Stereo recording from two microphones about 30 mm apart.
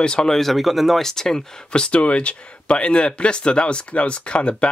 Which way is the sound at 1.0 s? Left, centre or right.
Centre.